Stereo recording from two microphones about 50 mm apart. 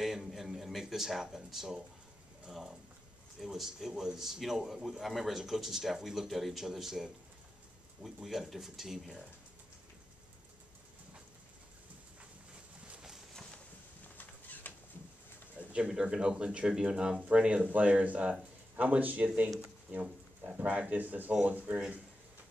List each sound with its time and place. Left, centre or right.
0.0 s a man's voice: centre
14.0 s a sound: left
15.9 s speech: centre
20.5 s speech: right